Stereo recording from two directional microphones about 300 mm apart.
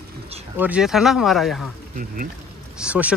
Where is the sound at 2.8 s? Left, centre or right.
Centre.